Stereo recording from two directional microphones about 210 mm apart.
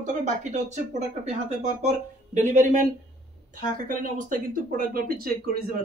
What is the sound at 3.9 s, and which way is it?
Speech, 40° right (ahead or behind).